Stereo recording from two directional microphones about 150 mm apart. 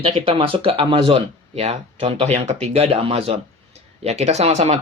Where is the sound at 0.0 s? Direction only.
40° right (ahead or behind).